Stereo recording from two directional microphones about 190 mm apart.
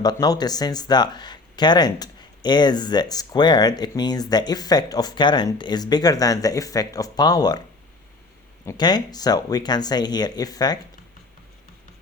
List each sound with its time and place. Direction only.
0.0 s speech: 20° left (ahead or behind)
8.6 s speech: 20° left (ahead or behind)